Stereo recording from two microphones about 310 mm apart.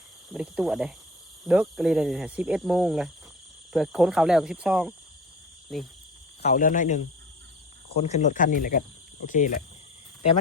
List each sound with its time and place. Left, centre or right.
0.3 s speech: centre
6.4 s speech: left